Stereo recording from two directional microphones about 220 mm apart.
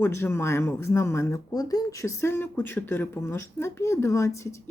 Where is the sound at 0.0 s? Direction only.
10° left (ahead or behind).